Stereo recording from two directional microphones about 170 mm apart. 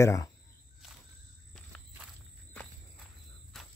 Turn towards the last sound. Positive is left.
turn(degrees=5)  # may be behind; listen again after turning